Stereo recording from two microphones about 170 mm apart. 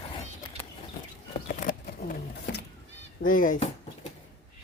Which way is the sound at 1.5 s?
50° left (ahead or behind).